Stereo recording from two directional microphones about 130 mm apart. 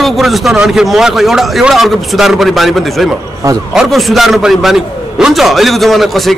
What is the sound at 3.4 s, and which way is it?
Speech, 25° right (ahead or behind).